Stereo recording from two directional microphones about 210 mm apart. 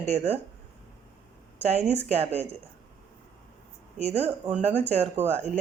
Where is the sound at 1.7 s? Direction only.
30° right (ahead or behind).